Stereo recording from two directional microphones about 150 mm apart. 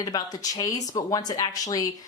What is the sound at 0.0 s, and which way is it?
A woman's voice, 25° left (ahead or behind).